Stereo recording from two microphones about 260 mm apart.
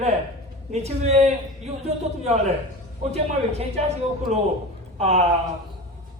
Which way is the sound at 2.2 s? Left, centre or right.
Right.